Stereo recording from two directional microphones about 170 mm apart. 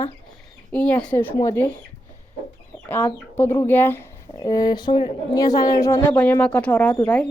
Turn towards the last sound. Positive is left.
turn(degrees=5)  # may be behind; listen again after turning